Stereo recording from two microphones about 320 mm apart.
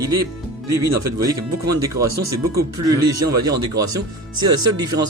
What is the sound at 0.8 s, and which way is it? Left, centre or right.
Speech, right.